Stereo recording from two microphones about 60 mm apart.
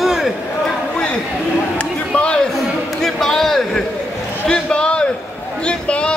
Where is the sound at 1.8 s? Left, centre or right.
Centre.